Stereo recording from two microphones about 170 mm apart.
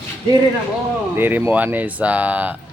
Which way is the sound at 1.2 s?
10° right (ahead or behind).